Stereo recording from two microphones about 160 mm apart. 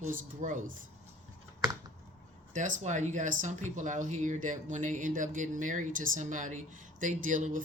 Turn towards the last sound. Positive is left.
turn(degrees=-55)  # may be behind; listen again after turning